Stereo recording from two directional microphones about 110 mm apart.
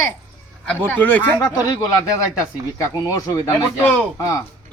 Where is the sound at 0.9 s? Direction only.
15° left (ahead or behind).